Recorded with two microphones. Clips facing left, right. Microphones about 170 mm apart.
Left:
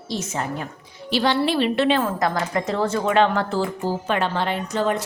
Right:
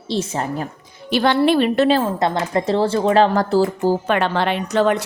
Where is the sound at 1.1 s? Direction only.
55° right (ahead or behind).